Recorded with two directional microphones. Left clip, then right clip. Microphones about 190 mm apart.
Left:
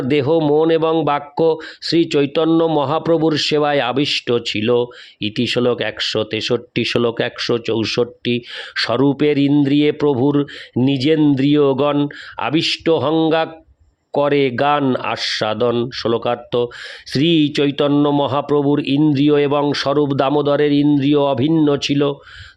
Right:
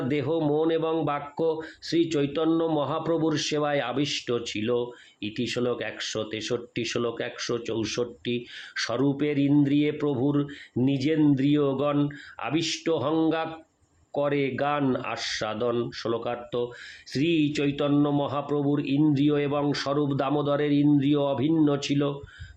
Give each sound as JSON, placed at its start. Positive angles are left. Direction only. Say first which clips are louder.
{"t": 0.1, "sound": "speech", "louder": "left 12 dB", "side_deg": 55}